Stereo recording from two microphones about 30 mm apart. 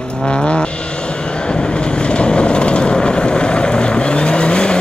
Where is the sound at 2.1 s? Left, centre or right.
Left.